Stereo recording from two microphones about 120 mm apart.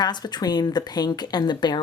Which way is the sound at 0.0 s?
35° left (ahead or behind).